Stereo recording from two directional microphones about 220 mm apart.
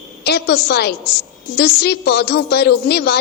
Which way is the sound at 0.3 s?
45° left (ahead or behind).